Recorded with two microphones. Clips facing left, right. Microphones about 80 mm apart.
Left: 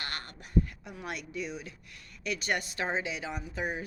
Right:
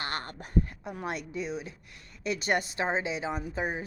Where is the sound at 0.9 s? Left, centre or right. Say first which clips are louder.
Right 5 dB; right.